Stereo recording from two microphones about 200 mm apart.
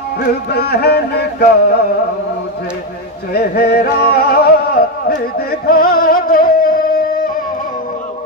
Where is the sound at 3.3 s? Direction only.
50° left (ahead or behind).